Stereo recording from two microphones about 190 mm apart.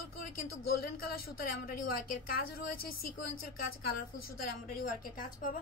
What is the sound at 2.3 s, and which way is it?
Speech, 50° left (ahead or behind).